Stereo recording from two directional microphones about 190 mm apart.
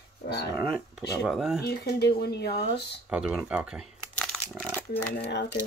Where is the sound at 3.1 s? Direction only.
5° right (ahead or behind).